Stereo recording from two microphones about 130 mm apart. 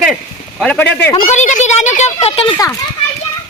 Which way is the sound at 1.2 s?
65° left (ahead or behind).